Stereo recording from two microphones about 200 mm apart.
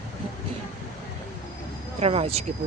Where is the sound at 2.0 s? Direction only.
30° right (ahead or behind).